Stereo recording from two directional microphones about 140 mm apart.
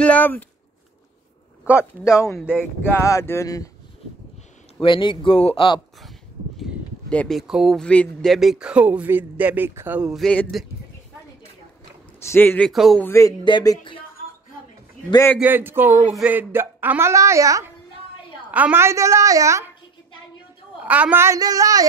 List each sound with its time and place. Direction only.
0.0 s speech: 10° left (ahead or behind)
1.6 s speech: 10° right (ahead or behind)
2.9 s speech: 20° left (ahead or behind)
4.8 s speech: 35° left (ahead or behind)
6.0 s a sound: centre (ahead or behind)
7.2 s speech: centre (ahead or behind)
12.2 s speech: 15° left (ahead or behind)
12.7 s speech: 5° right (ahead or behind)
13.0 s speech: 20° left (ahead or behind)
13.4 s speech: 30° left (ahead or behind)
15.3 s speech: 10° right (ahead or behind)
18.5 s a woman's voice: 10° right (ahead or behind)
20.8 s a woman's voice: 10° right (ahead or behind)